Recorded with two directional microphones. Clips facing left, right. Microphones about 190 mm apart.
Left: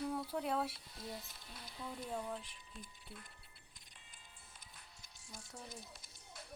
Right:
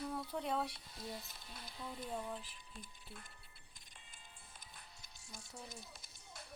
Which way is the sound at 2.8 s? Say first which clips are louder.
Left 1 dB; 50° right (ahead or behind).